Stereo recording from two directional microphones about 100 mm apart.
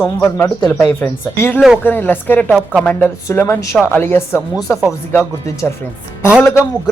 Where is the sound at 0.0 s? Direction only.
20° left (ahead or behind).